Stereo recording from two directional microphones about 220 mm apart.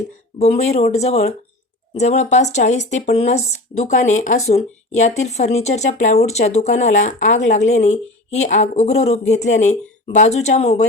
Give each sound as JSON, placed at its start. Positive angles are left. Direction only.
{"t": 0.3, "sound": "speech", "side_deg": 30}